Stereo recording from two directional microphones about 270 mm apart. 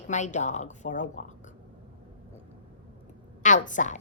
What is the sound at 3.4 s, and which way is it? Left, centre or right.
Speech, left.